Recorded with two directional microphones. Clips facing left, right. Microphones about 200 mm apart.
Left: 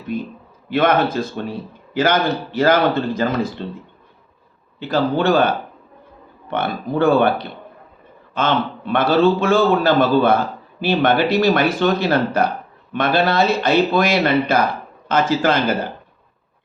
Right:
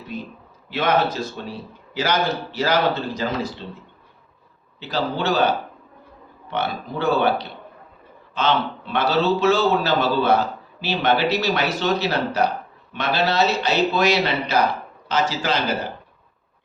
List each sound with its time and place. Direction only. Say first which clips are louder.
0.1 s a man's voice: left 6 dB; 55° left (ahead or behind)
4.8 s a man's voice: left 6 dB; 55° left (ahead or behind)